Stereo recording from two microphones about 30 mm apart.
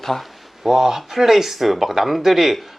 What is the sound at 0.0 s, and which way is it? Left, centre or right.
Speech, centre.